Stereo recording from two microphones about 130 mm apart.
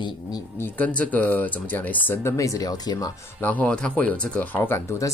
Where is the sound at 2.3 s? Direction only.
25° left (ahead or behind).